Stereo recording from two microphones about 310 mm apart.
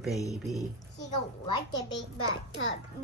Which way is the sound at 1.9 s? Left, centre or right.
Left.